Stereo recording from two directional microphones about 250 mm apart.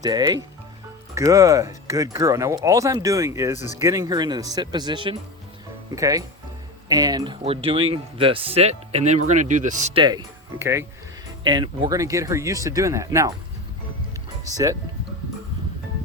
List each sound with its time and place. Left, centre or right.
0.0 s speech: centre
14.5 s speech: centre